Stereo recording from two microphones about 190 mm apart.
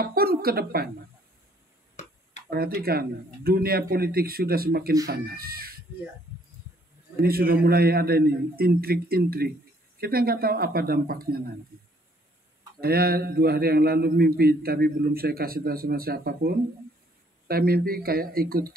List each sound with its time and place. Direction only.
0.0 s a sound: 50° right (ahead or behind)
2.5 s a man's voice: 55° right (ahead or behind)
7.2 s a man's voice: 55° right (ahead or behind)
12.8 s a man's voice: 55° right (ahead or behind)